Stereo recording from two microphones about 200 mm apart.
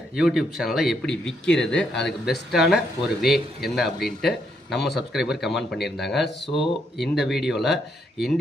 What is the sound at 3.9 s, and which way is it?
Speech, 55° left (ahead or behind).